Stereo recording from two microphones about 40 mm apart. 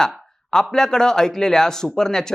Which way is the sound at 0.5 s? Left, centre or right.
Centre.